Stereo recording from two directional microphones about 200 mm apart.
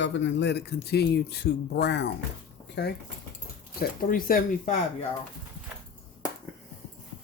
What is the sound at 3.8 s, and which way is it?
Speech, 45° left (ahead or behind).